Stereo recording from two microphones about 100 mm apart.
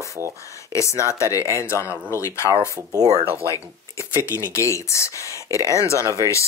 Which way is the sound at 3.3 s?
30° left (ahead or behind).